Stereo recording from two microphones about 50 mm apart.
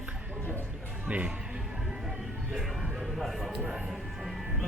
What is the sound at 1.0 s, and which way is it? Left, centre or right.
Speech, right.